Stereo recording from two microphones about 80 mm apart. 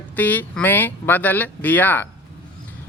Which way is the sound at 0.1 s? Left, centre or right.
Left.